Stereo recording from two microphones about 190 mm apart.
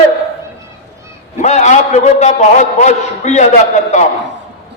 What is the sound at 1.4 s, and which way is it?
A man's voice, 40° left (ahead or behind).